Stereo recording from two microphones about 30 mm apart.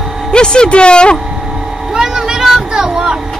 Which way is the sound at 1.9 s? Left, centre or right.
Right.